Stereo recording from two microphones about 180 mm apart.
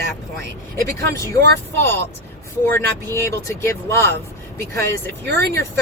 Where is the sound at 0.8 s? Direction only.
15° left (ahead or behind).